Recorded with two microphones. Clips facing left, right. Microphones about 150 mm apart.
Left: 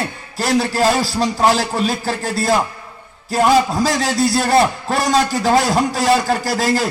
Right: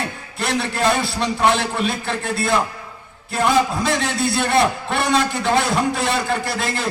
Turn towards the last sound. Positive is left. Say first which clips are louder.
# left 6 dB
turn(degrees=40)  # may be behind; listen again after turning